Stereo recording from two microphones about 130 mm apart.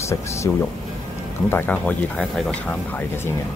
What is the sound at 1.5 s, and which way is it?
Speech, 15° left (ahead or behind).